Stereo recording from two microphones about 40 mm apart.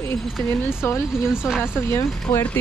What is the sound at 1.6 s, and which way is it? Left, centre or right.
Speech, left.